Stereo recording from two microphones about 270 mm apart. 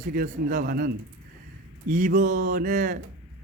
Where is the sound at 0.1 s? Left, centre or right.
Right.